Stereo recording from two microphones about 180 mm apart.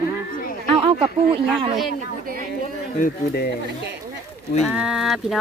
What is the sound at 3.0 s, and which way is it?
Speech, 60° left (ahead or behind).